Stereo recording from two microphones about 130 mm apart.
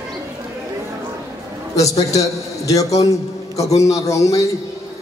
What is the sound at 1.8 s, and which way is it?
A man's voice, 25° left (ahead or behind).